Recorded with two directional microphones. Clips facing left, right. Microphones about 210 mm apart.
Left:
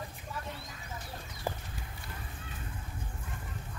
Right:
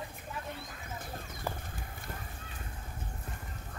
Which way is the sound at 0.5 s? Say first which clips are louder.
Right 1 dB; 50° right (ahead or behind).